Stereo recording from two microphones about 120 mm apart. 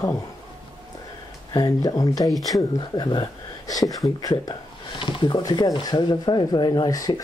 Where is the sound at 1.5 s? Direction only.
35° left (ahead or behind).